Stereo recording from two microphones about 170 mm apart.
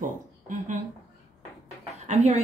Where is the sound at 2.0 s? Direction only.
40° right (ahead or behind).